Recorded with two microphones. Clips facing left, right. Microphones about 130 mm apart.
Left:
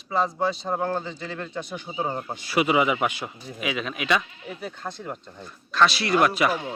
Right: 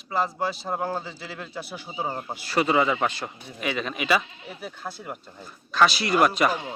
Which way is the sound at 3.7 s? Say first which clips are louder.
Right 1 dB; centre (ahead or behind).